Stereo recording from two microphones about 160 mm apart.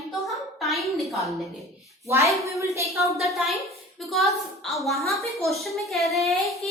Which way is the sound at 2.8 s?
20° left (ahead or behind).